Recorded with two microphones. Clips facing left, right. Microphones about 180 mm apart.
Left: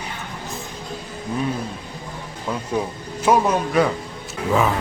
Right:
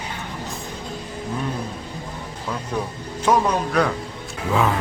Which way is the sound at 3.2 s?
5° left (ahead or behind).